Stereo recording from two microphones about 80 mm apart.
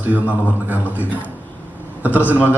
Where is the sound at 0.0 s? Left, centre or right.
Centre.